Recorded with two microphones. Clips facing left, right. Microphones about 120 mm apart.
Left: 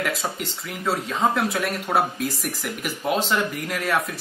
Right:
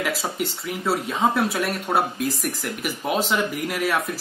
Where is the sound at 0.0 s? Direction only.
5° right (ahead or behind).